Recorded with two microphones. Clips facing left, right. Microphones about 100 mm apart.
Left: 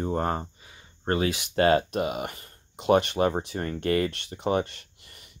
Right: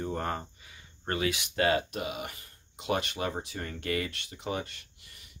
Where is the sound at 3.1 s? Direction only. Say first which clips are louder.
Left 9 dB; 40° left (ahead or behind).